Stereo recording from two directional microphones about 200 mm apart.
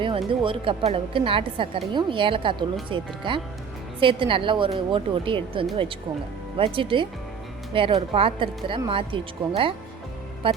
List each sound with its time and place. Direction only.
0.3 s speech: 25° right (ahead or behind)
10.4 s music: 25° right (ahead or behind)